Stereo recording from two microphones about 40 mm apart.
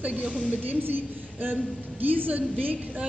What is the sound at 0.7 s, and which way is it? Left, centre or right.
A woman's voice, right.